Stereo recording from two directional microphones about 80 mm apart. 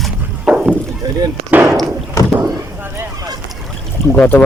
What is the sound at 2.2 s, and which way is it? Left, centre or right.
Rowboat, left.